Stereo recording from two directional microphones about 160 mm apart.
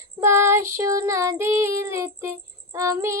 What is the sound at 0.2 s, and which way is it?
Female singing, 15° right (ahead or behind).